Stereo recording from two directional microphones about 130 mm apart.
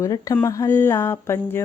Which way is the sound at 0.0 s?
25° left (ahead or behind).